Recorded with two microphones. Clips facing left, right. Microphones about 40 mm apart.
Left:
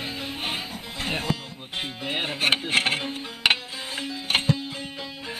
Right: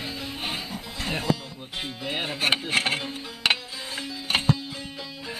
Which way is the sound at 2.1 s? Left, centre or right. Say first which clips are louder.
Left 1 dB; centre.